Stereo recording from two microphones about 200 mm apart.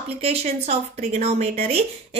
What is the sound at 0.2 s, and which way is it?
A woman's voice, 30° right (ahead or behind).